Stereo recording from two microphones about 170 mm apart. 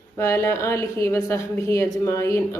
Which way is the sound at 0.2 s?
15° left (ahead or behind).